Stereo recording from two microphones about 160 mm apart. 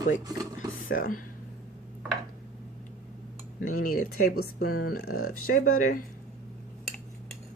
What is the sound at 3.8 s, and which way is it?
Speech, 65° left (ahead or behind).